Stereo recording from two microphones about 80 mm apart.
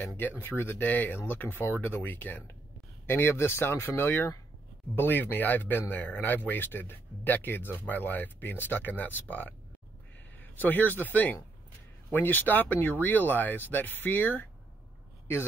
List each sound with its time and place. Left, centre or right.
0.2 s speech: left